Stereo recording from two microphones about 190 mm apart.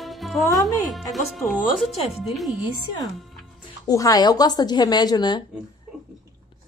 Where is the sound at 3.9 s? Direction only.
20° left (ahead or behind).